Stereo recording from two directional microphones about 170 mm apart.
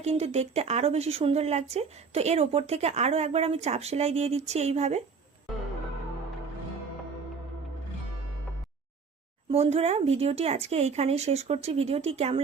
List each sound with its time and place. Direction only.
0.0 s a woman's voice: 40° right (ahead or behind)
9.5 s a woman's voice: 35° right (ahead or behind)